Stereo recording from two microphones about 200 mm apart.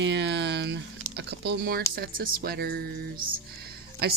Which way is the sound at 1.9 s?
50° right (ahead or behind).